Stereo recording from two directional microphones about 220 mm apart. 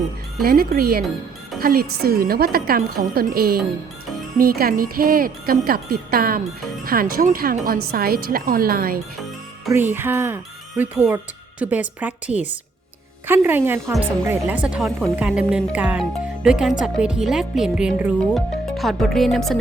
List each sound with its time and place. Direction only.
0.4 s a woman's voice: 45° right (ahead or behind)
9.6 s a woman's voice: 10° right (ahead or behind)